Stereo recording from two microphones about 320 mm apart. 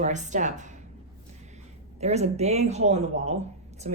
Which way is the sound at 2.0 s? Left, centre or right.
Centre.